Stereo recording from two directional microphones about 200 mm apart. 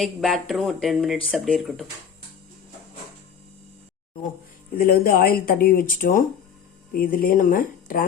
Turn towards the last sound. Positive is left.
turn(degrees=45)  # may be behind; listen again after turning